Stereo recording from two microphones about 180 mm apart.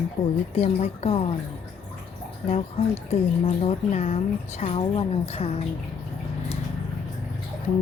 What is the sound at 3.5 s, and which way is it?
Speech, 40° left (ahead or behind).